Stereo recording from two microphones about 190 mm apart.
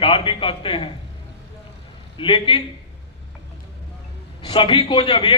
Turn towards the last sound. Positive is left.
turn(degrees=25)  # may be behind; listen again after turning